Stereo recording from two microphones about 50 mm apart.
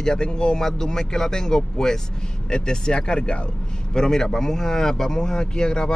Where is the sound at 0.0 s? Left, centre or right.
Centre.